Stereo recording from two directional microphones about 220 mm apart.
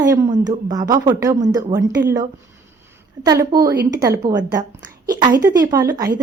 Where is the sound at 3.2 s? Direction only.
15° right (ahead or behind).